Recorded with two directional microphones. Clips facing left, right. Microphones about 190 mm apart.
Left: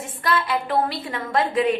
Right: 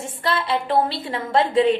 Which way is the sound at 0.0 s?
25° right (ahead or behind).